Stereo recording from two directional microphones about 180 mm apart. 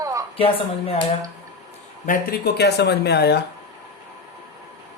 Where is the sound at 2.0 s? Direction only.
50° left (ahead or behind).